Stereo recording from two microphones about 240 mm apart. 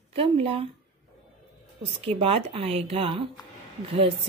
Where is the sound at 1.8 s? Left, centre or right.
Right.